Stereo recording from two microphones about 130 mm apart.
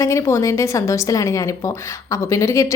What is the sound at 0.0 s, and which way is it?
A woman's voice, 20° left (ahead or behind).